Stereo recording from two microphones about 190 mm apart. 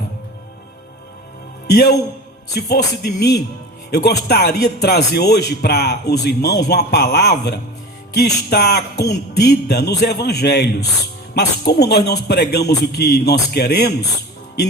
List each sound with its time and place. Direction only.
1.6 s a man's voice: 60° left (ahead or behind)